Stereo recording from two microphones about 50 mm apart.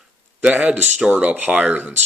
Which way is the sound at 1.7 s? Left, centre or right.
Right.